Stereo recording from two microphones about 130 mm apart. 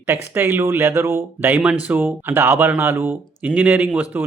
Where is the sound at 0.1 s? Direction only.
20° right (ahead or behind).